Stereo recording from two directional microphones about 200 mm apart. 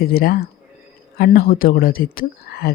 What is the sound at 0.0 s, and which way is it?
Speech, 50° left (ahead or behind).